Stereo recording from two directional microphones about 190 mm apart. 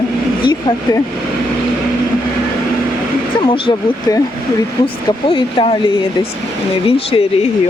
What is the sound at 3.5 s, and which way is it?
Speech, 25° left (ahead or behind).